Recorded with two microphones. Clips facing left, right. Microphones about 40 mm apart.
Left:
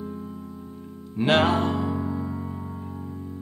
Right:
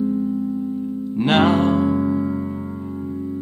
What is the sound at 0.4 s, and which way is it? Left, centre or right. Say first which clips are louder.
Music: right 15 dB; centre.